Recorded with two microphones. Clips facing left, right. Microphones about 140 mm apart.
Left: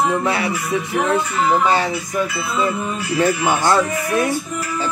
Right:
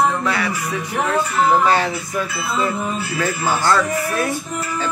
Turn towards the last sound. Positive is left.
turn(degrees=20)  # may be behind; listen again after turning